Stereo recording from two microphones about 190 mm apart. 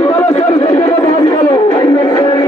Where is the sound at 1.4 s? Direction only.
20° left (ahead or behind).